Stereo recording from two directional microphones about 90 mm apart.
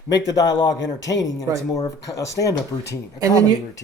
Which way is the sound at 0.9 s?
40° left (ahead or behind).